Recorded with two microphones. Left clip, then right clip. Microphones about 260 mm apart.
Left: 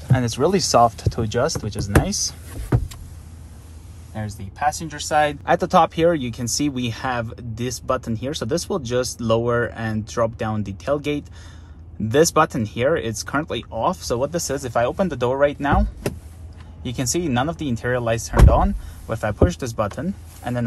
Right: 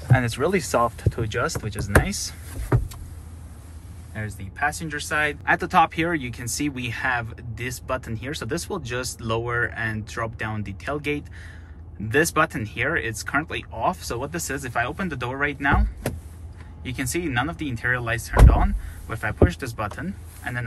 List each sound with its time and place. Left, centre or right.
0.1 s speech: centre
0.7 s speech: right
1.2 s speech: centre
2.5 s vehicle: centre
4.1 s speech: centre
16.8 s speech: centre